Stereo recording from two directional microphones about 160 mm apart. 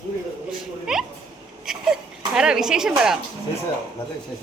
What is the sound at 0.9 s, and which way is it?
Speech, 5° right (ahead or behind).